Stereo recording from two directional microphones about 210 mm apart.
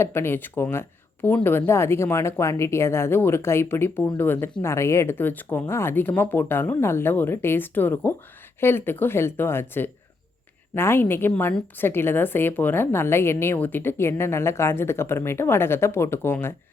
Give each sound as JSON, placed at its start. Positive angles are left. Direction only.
{"t": 0.0, "sound": "a woman's voice", "side_deg": 10}